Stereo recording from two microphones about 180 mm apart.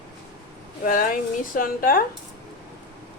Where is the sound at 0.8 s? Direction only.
50° left (ahead or behind).